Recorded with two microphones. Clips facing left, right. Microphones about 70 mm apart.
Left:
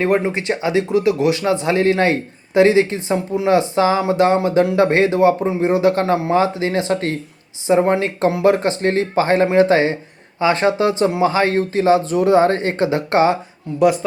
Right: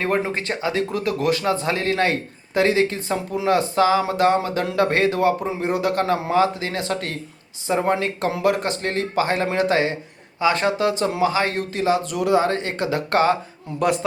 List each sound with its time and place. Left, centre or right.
0.0 s speech: centre
13.7 s a man's voice: centre